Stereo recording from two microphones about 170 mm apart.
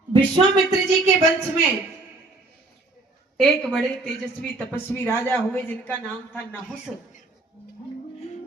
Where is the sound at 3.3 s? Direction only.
Centre (ahead or behind).